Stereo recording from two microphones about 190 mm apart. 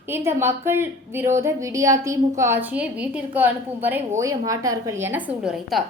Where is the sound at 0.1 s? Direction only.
15° right (ahead or behind).